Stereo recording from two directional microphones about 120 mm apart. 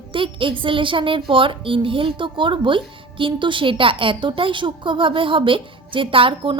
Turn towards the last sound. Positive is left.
turn(degrees=-45)  # may be behind; listen again after turning